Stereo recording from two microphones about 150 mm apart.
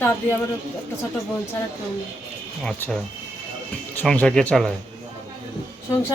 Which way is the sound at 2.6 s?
5° left (ahead or behind).